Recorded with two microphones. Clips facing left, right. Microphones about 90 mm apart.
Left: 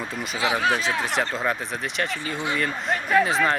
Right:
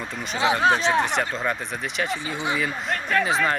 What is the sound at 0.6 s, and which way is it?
Speech, 30° right (ahead or behind).